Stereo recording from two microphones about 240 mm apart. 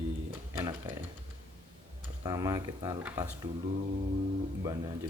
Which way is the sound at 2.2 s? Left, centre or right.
Centre.